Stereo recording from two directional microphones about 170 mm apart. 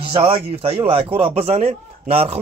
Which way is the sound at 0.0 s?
35° right (ahead or behind).